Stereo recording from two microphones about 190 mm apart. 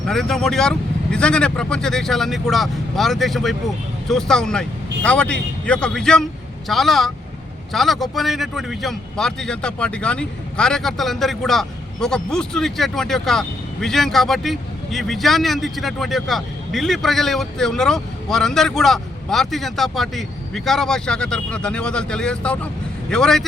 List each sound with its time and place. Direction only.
0.1 s a man's voice: centre (ahead or behind)